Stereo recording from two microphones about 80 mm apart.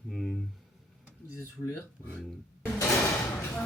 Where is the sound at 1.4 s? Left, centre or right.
Left.